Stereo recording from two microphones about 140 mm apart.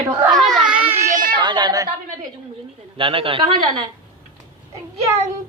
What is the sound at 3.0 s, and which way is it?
Speech, 40° right (ahead or behind).